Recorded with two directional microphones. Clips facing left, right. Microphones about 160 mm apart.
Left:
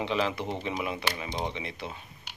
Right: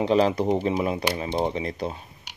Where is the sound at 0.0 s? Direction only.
40° right (ahead or behind).